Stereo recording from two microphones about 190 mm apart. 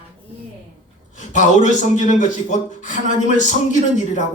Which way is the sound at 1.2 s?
40° left (ahead or behind).